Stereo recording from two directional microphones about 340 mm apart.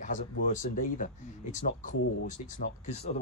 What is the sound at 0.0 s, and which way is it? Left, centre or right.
Speech, left.